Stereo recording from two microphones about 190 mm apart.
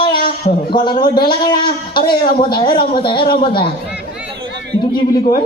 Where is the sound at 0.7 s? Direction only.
25° left (ahead or behind).